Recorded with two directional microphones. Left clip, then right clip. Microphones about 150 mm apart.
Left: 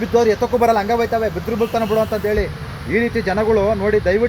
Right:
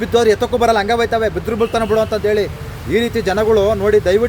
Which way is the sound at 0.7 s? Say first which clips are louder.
Right 2 dB; 35° right (ahead or behind).